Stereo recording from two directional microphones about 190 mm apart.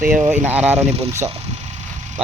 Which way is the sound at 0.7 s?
35° right (ahead or behind).